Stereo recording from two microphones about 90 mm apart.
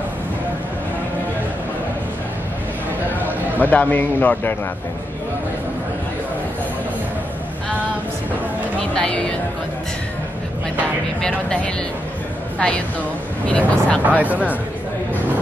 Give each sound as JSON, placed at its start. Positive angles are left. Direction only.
{"t": 3.6, "sound": "a man's voice", "side_deg": 20}
{"t": 8.9, "sound": "speech", "side_deg": 10}
{"t": 11.1, "sound": "a woman's voice", "side_deg": 10}
{"t": 14.0, "sound": "speech", "side_deg": -15}